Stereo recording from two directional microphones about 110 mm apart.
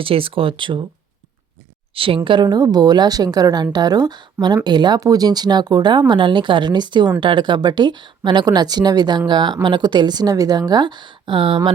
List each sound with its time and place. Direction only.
0.0 s speech: 55° right (ahead or behind)
2.0 s a woman's voice: 55° right (ahead or behind)